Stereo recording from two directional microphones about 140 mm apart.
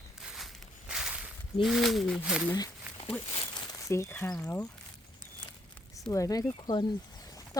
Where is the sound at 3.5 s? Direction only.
20° left (ahead or behind).